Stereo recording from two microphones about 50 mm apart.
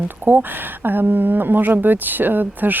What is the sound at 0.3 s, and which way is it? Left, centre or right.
Speech, right.